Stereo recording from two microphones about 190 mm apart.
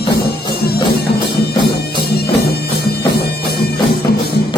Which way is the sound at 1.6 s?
55° left (ahead or behind).